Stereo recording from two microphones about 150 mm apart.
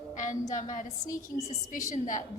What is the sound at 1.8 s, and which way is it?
Speech, 55° left (ahead or behind).